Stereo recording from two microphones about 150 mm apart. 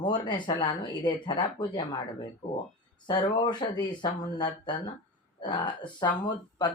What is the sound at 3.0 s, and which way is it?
Speech, 30° left (ahead or behind).